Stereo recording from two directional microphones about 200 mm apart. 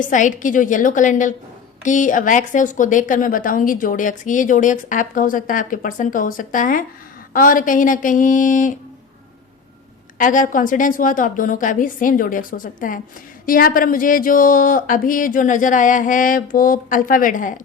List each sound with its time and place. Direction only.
0.0 s speech: 40° left (ahead or behind)
10.2 s speech: 40° left (ahead or behind)